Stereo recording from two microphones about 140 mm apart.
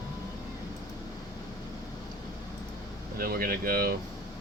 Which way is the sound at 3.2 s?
90° right.